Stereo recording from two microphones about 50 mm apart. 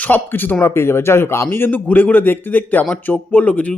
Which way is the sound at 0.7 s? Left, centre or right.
Left.